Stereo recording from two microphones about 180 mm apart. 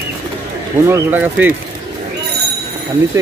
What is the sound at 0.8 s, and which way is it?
Speech, 10° right (ahead or behind).